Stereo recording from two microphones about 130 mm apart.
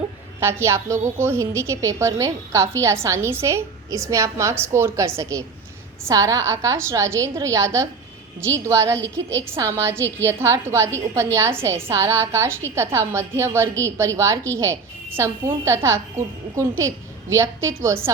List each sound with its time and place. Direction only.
0.3 s a woman's voice: 20° right (ahead or behind)